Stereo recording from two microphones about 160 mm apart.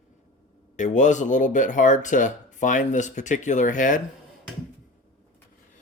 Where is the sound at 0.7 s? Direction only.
50° left (ahead or behind).